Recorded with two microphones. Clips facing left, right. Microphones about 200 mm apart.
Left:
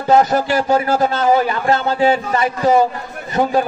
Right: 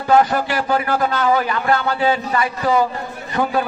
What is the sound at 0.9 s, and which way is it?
A man's voice, 25° left (ahead or behind).